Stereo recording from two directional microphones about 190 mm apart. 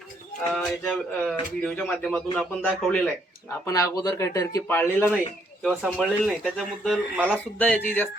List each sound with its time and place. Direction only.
0.4 s speech: 5° left (ahead or behind)
3.7 s speech: 15° left (ahead or behind)
5.6 s speech: centre (ahead or behind)
7.6 s speech: 10° left (ahead or behind)